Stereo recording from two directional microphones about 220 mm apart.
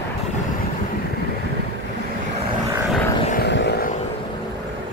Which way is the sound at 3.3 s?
45° left (ahead or behind).